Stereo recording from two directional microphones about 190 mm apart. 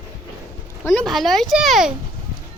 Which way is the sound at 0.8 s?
Centre (ahead or behind).